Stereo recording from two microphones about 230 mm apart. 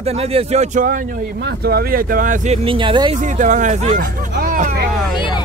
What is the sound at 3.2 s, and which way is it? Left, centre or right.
Speech, right.